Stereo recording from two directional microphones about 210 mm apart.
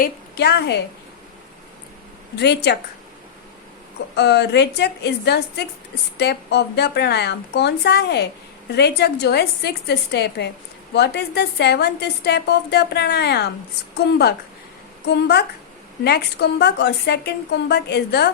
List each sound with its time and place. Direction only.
0.0 s a woman's voice: 50° left (ahead or behind)
2.3 s a woman's voice: 50° left (ahead or behind)
4.1 s a woman's voice: 50° left (ahead or behind)